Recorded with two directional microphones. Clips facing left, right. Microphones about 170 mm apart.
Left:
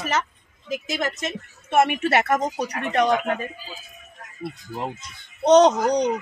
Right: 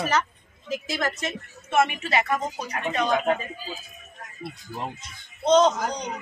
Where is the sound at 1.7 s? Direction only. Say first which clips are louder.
Left 4 dB; 60° left (ahead or behind).